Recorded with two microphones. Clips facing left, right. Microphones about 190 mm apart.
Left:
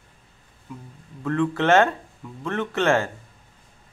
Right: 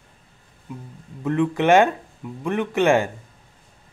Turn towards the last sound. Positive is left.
turn(degrees=-15)  # may be behind; listen again after turning